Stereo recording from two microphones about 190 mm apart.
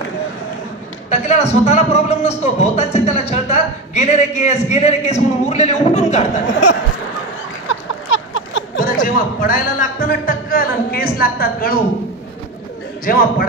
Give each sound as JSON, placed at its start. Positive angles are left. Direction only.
{"t": 1.1, "sound": "speech", "side_deg": 35}
{"t": 7.6, "sound": "a sound", "side_deg": 85}
{"t": 8.7, "sound": "speech", "side_deg": 45}
{"t": 13.0, "sound": "speech", "side_deg": 50}